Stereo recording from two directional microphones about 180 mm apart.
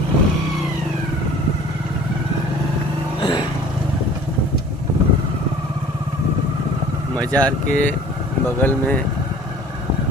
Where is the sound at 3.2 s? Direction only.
25° left (ahead or behind).